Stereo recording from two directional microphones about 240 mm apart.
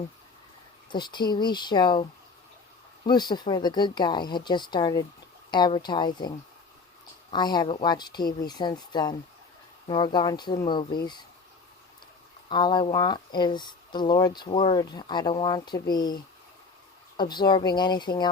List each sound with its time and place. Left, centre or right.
0.9 s speech: centre
3.1 s speech: centre
12.5 s speech: centre